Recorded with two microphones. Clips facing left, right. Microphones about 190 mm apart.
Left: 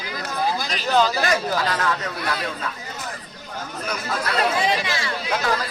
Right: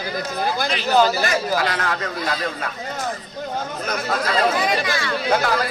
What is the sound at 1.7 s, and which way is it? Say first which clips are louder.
Speech: left 1 dB; 45° right (ahead or behind).